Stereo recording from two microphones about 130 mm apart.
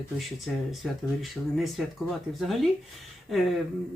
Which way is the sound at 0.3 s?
Centre (ahead or behind).